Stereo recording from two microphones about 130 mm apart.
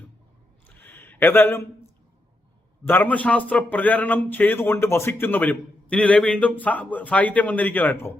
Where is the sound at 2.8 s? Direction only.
15° left (ahead or behind).